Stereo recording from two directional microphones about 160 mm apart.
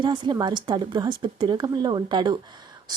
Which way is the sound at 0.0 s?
30° right (ahead or behind).